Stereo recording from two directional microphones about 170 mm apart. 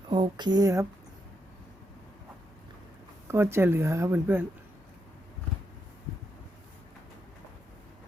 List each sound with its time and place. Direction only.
0.1 s speech: 25° right (ahead or behind)
3.2 s speech: 15° right (ahead or behind)